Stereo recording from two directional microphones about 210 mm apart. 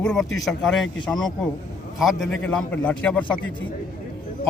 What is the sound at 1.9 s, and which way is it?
A man's voice, centre (ahead or behind).